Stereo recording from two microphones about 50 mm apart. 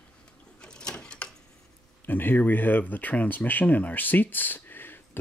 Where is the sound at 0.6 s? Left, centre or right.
Centre.